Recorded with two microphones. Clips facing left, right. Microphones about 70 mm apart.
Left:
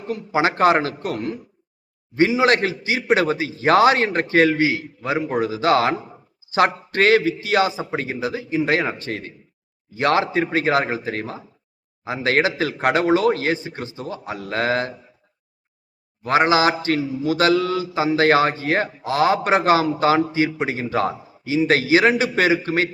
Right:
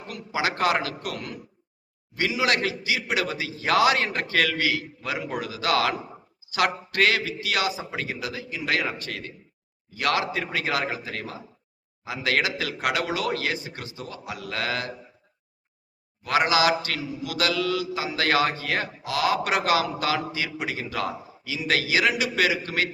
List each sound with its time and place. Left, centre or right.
0.0 s mantra: left
16.2 s mantra: left